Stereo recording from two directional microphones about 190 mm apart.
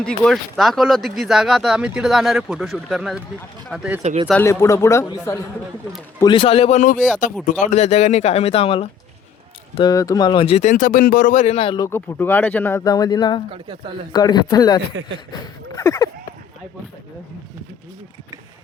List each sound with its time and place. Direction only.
0.0 s speech: centre (ahead or behind)
4.0 s speech: 35° right (ahead or behind)
4.3 s speech: 10° left (ahead or behind); by 8.9 s 30° left (ahead or behind)
9.7 s speech: 20° left (ahead or behind)
11.9 s speech: 10° left (ahead or behind)